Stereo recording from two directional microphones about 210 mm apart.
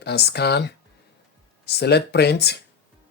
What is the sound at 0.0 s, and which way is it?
Speech, 50° left (ahead or behind).